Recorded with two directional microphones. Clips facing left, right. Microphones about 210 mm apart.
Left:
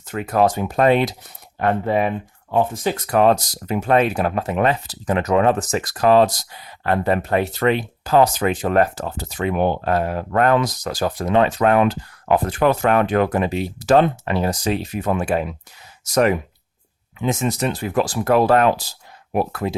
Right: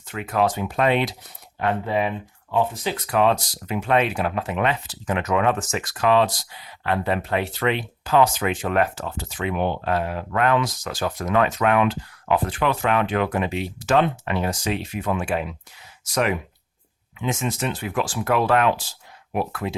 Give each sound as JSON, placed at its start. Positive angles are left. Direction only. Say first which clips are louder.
{"t": 0.1, "sound": "speech", "louder": "left 4 dB", "side_deg": 40}